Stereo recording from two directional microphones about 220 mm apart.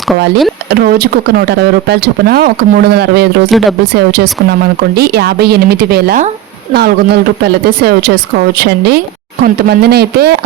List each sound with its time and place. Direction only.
0.7 s speech: 45° right (ahead or behind)
3.5 s speech: centre (ahead or behind)
3.9 s speech: 45° right (ahead or behind)